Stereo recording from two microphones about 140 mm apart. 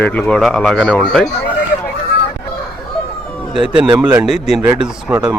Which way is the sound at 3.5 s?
5° right (ahead or behind).